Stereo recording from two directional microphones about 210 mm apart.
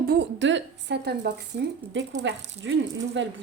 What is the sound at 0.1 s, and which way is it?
Speech, 55° right (ahead or behind).